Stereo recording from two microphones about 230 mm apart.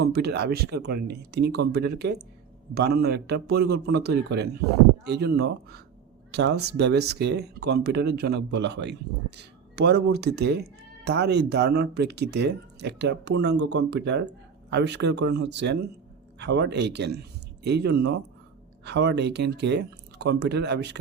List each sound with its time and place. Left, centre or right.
0.0 s speech: right